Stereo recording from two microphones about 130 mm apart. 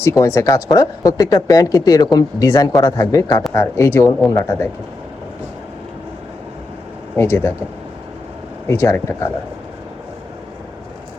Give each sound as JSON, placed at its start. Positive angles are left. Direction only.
{"t": 0.0, "sound": "speech", "side_deg": 25}
{"t": 7.2, "sound": "speech", "side_deg": 20}
{"t": 8.6, "sound": "speech", "side_deg": 20}